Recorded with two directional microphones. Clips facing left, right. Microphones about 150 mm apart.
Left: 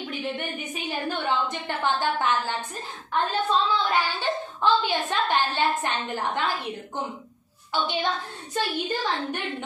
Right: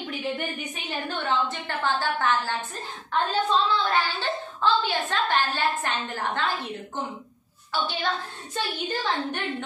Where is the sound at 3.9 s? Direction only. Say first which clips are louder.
Left 1 dB; 15° left (ahead or behind).